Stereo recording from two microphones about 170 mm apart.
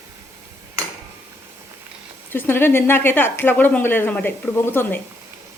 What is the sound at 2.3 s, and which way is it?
Speech, 10° left (ahead or behind).